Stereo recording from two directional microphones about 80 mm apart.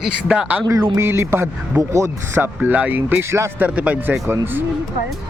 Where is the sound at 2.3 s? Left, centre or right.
Right.